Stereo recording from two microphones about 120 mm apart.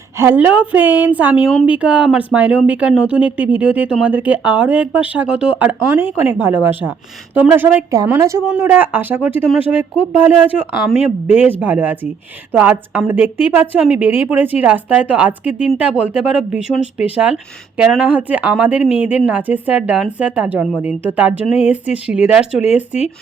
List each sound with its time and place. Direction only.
0.2 s a woman's voice: 15° right (ahead or behind)